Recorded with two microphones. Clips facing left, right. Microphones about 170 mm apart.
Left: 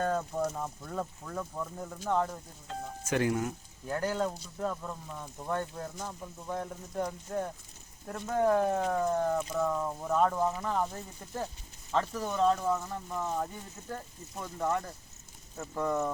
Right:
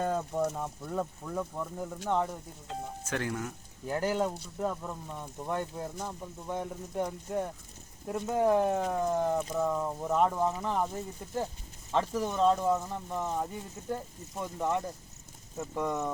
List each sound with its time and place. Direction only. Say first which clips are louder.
0.0 s speech: right 1 dB; 15° right (ahead or behind)
3.1 s speech: left 5 dB; 15° left (ahead or behind)
3.8 s speech: right 2 dB; 15° right (ahead or behind)
8.0 s speech: right 1 dB; 15° right (ahead or behind)